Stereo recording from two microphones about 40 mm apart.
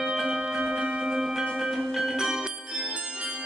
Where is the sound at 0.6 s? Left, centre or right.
Right.